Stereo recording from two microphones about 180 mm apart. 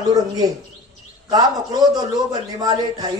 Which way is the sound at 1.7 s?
20° right (ahead or behind).